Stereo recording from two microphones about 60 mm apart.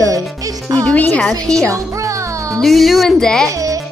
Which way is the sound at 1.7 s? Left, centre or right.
Right.